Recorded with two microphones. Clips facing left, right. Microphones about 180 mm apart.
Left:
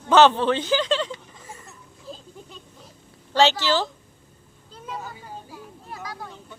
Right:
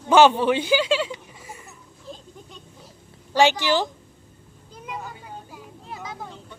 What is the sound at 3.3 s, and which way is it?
Speech, 15° right (ahead or behind).